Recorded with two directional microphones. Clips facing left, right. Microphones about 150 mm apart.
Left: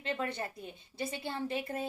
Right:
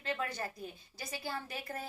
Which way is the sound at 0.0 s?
25° left (ahead or behind).